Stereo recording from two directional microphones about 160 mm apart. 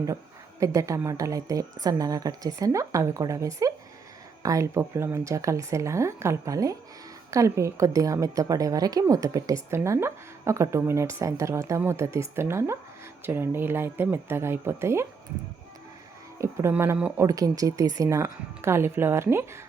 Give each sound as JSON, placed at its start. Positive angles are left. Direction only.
{"t": 0.6, "sound": "a woman's voice", "side_deg": -20}
{"t": 16.4, "sound": "speech", "side_deg": -15}